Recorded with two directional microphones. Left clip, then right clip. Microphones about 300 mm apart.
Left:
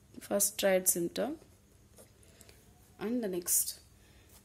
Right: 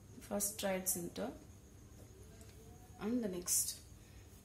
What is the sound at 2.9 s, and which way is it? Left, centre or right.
Speech, left.